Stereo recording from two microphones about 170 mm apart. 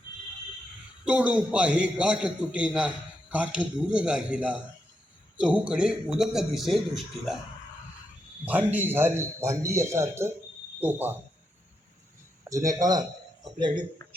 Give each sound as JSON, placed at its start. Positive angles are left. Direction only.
{"t": 1.0, "sound": "a man's voice", "side_deg": -5}
{"t": 8.4, "sound": "a man's voice", "side_deg": -10}
{"t": 12.5, "sound": "speech", "side_deg": -20}